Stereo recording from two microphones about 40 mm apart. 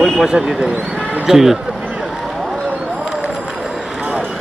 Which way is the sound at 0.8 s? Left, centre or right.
Right.